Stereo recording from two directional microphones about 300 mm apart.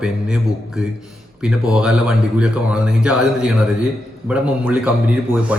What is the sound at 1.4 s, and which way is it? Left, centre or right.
A woman's voice, centre.